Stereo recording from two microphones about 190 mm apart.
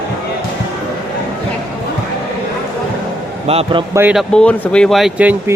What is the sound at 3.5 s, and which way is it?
Speech, 30° right (ahead or behind).